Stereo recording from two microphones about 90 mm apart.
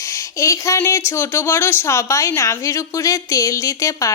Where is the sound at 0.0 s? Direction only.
35° left (ahead or behind).